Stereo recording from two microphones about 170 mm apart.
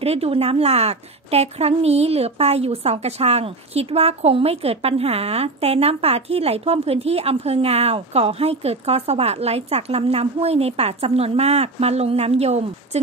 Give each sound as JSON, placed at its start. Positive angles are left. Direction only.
{"t": 0.0, "sound": "a woman's voice", "side_deg": -35}